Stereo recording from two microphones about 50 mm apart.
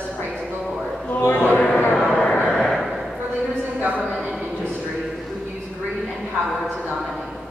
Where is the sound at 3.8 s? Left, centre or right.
Right.